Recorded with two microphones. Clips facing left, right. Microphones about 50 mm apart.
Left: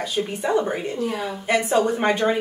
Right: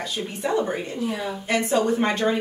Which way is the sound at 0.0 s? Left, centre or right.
Centre.